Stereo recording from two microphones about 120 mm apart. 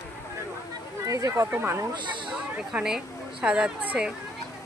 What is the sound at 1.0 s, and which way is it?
Speech, 25° right (ahead or behind).